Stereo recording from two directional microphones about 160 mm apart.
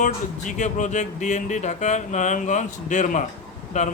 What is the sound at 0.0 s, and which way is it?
Speech, 50° left (ahead or behind).